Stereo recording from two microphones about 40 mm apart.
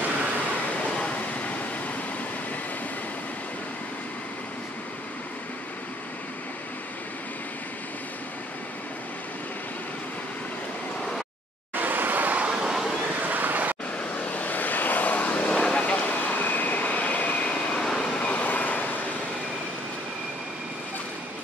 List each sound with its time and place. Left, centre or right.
0.9 s vehicle: left
11.7 s vehicle: right
12.4 s vehicle: right
13.2 s vehicle: right
13.9 s vehicle: left
17.9 s train: left